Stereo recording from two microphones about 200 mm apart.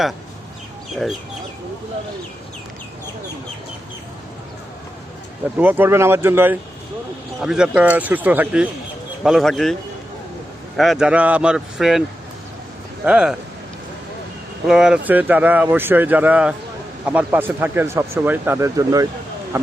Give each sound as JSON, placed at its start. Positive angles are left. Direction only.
{"t": 5.5, "sound": "speech", "side_deg": -10}
{"t": 10.8, "sound": "speech", "side_deg": 0}
{"t": 13.1, "sound": "speech", "side_deg": -5}
{"t": 14.7, "sound": "speech", "side_deg": -5}